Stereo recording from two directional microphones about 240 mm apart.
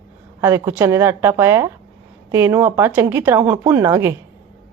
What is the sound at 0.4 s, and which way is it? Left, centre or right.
Speech, centre.